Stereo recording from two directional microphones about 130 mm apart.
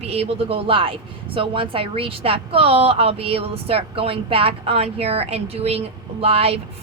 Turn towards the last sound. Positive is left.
turn(degrees=-50)  # may be behind; listen again after turning